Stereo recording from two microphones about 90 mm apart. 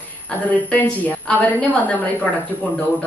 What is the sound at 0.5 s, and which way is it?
A woman's voice, 20° left (ahead or behind).